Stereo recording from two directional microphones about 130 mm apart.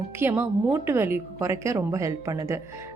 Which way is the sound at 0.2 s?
15° right (ahead or behind).